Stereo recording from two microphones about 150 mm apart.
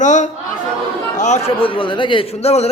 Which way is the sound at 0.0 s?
55° left (ahead or behind).